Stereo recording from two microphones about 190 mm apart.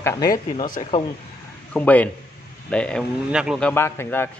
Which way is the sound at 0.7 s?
35° left (ahead or behind).